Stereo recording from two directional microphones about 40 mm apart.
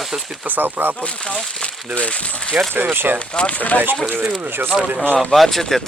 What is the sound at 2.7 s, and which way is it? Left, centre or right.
Speech, right.